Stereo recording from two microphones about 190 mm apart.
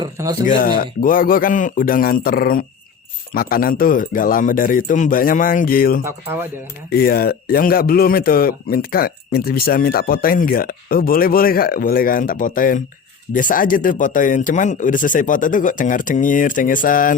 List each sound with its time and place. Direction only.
0.0 s speech: 20° right (ahead or behind)
0.4 s speech: 45° left (ahead or behind)